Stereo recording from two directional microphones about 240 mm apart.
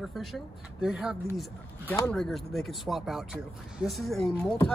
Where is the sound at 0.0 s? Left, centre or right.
Centre.